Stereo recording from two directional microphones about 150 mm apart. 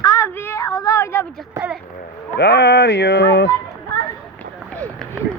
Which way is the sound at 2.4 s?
90° left.